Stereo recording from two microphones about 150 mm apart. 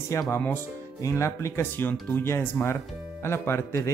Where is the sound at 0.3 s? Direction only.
10° left (ahead or behind).